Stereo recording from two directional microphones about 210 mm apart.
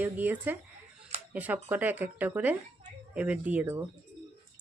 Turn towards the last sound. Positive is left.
turn(degrees=-10)  # may be behind; listen again after turning